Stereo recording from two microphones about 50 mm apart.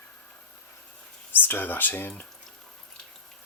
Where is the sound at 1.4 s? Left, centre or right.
Left.